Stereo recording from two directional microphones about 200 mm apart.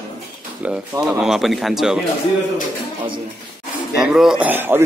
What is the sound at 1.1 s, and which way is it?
Speech, 5° right (ahead or behind).